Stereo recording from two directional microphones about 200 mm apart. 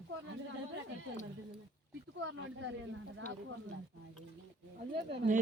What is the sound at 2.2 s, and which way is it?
Speech, 80° right.